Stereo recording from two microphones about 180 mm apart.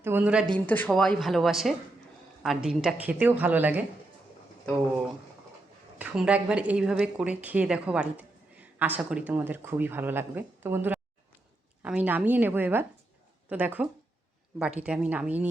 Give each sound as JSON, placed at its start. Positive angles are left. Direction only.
{"t": 0.0, "sound": "speech", "side_deg": -10}
{"t": 0.5, "sound": "speech", "side_deg": 5}
{"t": 6.0, "sound": "speech", "side_deg": -5}